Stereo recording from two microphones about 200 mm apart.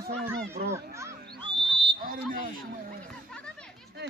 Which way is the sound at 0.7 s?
15° right (ahead or behind).